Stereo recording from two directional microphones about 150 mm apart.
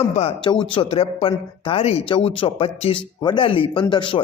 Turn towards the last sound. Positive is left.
turn(degrees=35)  # may be behind; listen again after turning